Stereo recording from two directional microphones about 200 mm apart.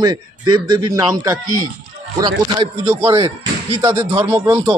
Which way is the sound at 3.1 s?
30° right (ahead or behind).